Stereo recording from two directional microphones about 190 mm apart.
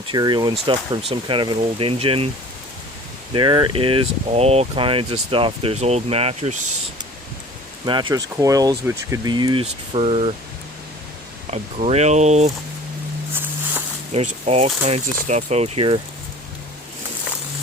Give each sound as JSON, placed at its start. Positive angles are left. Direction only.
{"t": 0.1, "sound": "speech", "side_deg": -25}
{"t": 3.3, "sound": "speech", "side_deg": -25}
{"t": 7.9, "sound": "speech", "side_deg": -25}
{"t": 11.5, "sound": "speech", "side_deg": -35}
{"t": 14.1, "sound": "speech", "side_deg": -35}